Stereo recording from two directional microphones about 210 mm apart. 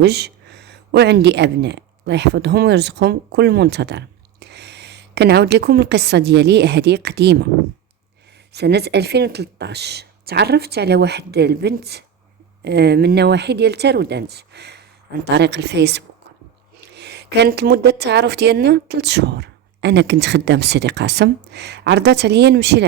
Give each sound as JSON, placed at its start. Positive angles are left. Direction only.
{"t": 0.0, "sound": "speech", "side_deg": -50}